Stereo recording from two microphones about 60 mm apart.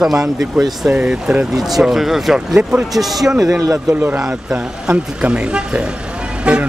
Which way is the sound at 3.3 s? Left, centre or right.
Right.